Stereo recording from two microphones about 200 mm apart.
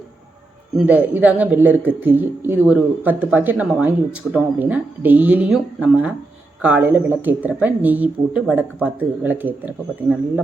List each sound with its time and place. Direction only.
0.8 s speech: 10° right (ahead or behind)